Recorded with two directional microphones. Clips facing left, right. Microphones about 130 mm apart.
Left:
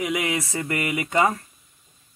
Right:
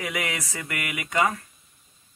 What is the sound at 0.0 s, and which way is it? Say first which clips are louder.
Speech: left 5 dB; 20° left (ahead or behind).